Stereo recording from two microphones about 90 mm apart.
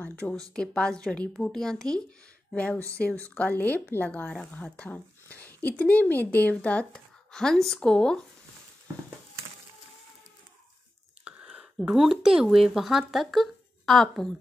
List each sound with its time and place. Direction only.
0.0 s a woman's voice: 20° left (ahead or behind)
2.5 s a woman's voice: 15° left (ahead or behind)
11.2 s speech: 15° right (ahead or behind); by 14.3 s 5° left (ahead or behind)